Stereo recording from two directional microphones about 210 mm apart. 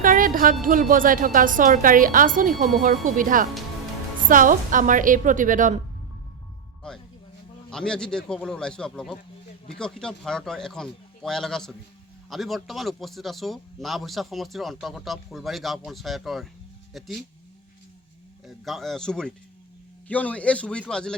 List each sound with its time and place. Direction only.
0.0 s music: 40° right (ahead or behind)
0.6 s speech: 40° right (ahead or behind)
6.8 s speech: 5° left (ahead or behind)
18.4 s speech: centre (ahead or behind)